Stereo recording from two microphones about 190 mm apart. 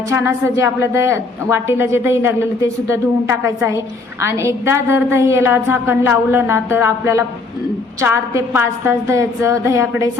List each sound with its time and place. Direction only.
0.1 s a woman's voice: 15° right (ahead or behind)